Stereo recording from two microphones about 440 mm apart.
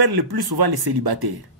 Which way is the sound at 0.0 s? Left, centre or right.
Right.